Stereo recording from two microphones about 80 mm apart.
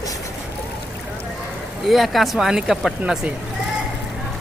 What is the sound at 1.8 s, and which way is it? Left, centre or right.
Speech, centre.